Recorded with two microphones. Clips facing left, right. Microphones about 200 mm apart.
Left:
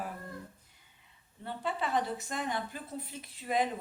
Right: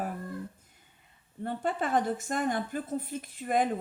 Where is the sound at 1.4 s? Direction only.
50° right (ahead or behind).